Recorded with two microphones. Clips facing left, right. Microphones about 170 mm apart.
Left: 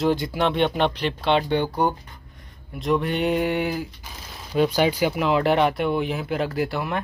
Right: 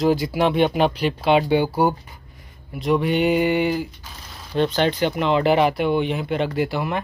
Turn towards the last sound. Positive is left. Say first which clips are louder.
# right 2 dB
turn(degrees=0)  # may be behind; listen again after turning